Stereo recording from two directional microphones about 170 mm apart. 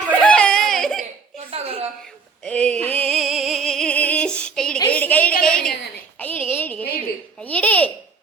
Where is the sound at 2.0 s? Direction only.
5° left (ahead or behind).